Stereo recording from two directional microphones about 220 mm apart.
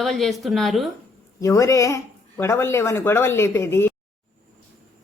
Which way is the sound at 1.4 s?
15° left (ahead or behind).